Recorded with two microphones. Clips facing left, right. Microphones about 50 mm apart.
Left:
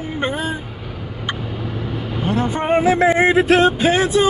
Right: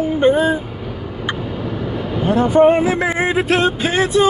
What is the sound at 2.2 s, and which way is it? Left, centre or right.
Vehicle, centre.